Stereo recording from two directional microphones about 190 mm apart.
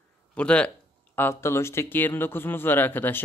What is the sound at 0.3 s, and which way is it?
Speech, 5° left (ahead or behind).